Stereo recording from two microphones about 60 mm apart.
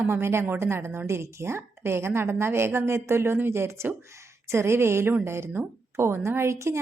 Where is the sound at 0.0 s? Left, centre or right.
Right.